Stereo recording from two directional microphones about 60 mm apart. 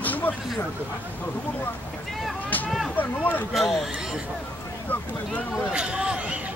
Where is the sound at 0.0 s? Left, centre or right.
Left.